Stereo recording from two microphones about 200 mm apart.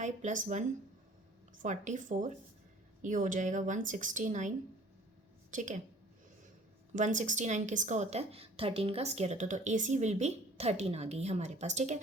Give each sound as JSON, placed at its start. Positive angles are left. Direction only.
{"t": 0.0, "sound": "a woman's voice", "side_deg": -40}
{"t": 6.9, "sound": "a woman's voice", "side_deg": -40}